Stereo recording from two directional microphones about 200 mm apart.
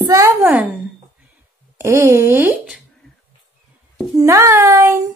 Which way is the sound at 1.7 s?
15° right (ahead or behind).